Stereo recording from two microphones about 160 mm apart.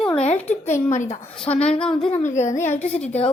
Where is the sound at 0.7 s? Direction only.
50° left (ahead or behind).